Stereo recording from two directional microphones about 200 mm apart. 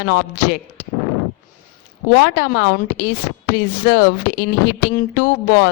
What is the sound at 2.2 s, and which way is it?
Speech, 50° left (ahead or behind).